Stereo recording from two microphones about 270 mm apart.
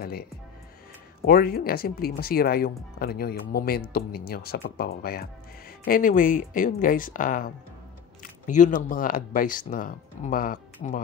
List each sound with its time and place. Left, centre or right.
1.2 s speech: left